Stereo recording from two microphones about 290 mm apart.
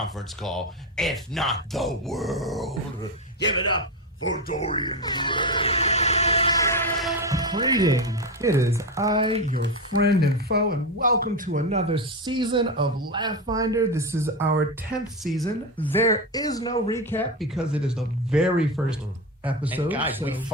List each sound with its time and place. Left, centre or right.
0.0 s speech: centre
4.2 s speech: left
4.5 s speech: centre
7.2 s speech: centre
9.6 s speech: right; by 20.2 s centre